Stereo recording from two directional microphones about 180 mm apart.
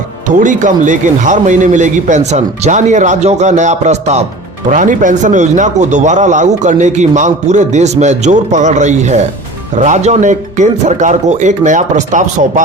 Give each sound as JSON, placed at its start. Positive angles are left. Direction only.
{"t": 0.3, "sound": "a man's voice", "side_deg": -45}